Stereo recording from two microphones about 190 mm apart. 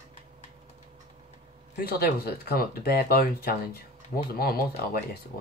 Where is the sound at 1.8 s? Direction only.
55° left (ahead or behind).